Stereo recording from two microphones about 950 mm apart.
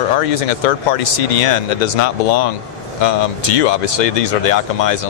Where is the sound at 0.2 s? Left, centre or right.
Left.